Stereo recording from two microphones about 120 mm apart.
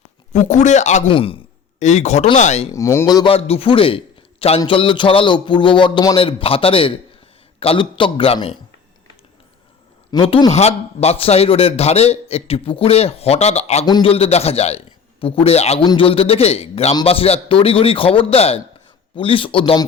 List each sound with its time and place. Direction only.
0.3 s speech: 90° left
1.1 s a man's voice: 50° left (ahead or behind)
1.8 s speech: 75° left (ahead or behind)
2.7 s a man's voice: 25° left (ahead or behind)
3.2 s a man's voice: 55° left (ahead or behind); by 6.1 s 40° left (ahead or behind)
6.1 s a man's voice: 50° left (ahead or behind)
10.1 s speech: 35° left (ahead or behind)
10.5 s a man's voice: 65° left (ahead or behind)
15.8 s speech: 35° left (ahead or behind)
16.0 s a man's voice: 55° left (ahead or behind)